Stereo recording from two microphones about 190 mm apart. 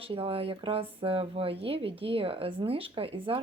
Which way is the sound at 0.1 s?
30° right (ahead or behind).